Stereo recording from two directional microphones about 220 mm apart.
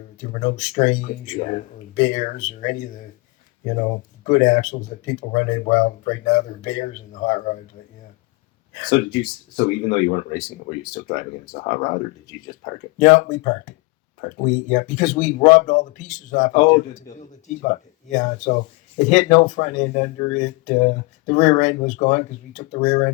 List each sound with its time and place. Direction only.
0.3 s speech: 35° left (ahead or behind)
8.8 s speech: 25° left (ahead or behind)
13.0 s speech: 35° left (ahead or behind)